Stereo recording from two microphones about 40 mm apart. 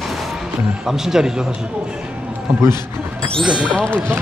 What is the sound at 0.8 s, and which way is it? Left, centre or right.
Speech, centre.